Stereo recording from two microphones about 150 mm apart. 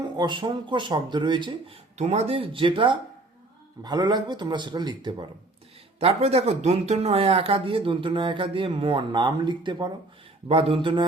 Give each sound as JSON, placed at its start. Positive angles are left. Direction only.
{"t": 0.0, "sound": "speech", "side_deg": -30}
{"t": 6.0, "sound": "speech", "side_deg": -45}